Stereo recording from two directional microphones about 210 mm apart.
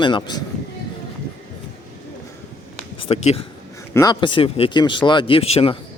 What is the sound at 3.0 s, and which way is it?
Speech, 30° left (ahead or behind).